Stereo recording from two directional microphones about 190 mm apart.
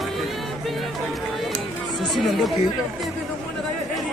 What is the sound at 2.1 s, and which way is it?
Speech, centre (ahead or behind).